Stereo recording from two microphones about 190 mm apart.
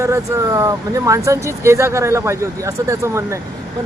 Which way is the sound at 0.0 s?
15° right (ahead or behind).